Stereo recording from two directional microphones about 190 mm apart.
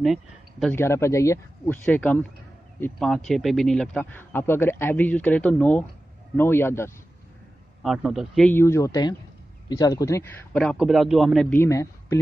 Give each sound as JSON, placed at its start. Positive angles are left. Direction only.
{"t": 0.0, "sound": "speech", "side_deg": 0}
{"t": 0.7, "sound": "a man's voice", "side_deg": 15}
{"t": 7.8, "sound": "a man's voice", "side_deg": 0}
{"t": 10.6, "sound": "a man's voice", "side_deg": 0}
{"t": 11.5, "sound": "a man's voice", "side_deg": 15}